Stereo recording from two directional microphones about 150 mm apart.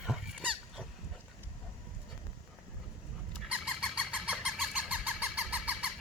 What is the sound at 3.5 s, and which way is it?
Fowl, 5° right (ahead or behind).